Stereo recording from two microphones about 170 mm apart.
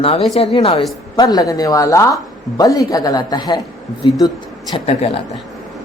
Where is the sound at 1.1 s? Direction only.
25° left (ahead or behind).